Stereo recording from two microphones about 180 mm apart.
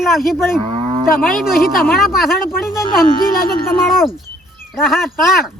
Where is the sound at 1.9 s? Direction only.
Centre (ahead or behind).